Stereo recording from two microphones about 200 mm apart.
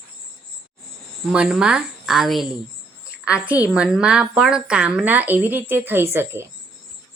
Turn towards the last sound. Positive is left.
turn(degrees=-10)  # may be behind; listen again after turning